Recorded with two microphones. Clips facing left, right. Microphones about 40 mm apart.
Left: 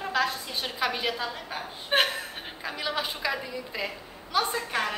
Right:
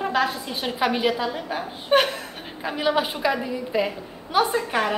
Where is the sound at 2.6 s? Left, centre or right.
Right.